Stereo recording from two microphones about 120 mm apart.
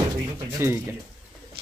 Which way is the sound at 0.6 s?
20° right (ahead or behind).